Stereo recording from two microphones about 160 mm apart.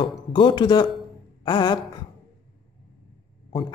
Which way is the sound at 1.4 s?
30° left (ahead or behind).